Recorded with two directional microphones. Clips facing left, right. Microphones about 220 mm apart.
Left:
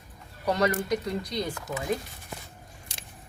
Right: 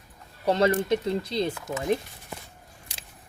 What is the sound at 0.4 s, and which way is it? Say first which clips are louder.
Speech: right 3 dB; 25° right (ahead or behind).